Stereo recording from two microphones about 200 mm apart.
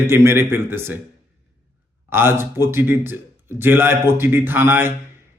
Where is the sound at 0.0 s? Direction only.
10° right (ahead or behind).